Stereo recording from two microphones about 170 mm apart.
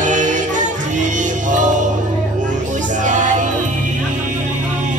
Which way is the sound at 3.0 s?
45° right (ahead or behind).